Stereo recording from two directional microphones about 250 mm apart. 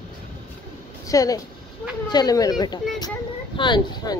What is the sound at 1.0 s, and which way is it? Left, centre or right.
Speech, centre.